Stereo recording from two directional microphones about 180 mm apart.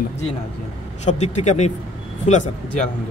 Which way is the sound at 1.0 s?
40° left (ahead or behind).